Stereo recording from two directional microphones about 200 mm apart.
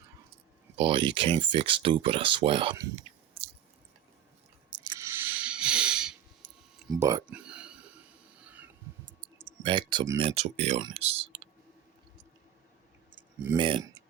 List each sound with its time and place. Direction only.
0.8 s speech: 25° right (ahead or behind)
4.7 s squish: 25° right (ahead or behind); by 6.1 s 5° right (ahead or behind)
6.7 s a sound: 5° right (ahead or behind)
7.0 s speech: 15° right (ahead or behind)
7.3 s whispering: 5° right (ahead or behind)
9.6 s speech: 25° right (ahead or behind)
13.6 s speech: 25° right (ahead or behind)